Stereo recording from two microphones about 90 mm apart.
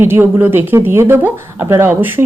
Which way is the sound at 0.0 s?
25° right (ahead or behind).